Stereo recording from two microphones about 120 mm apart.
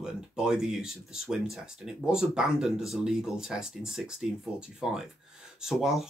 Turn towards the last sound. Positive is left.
turn(degrees=-5)  # may be behind; listen again after turning